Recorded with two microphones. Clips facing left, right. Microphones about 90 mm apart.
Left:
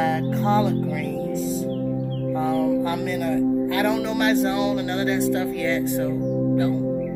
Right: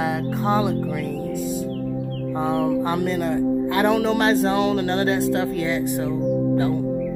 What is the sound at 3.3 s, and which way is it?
Speech, 35° right (ahead or behind).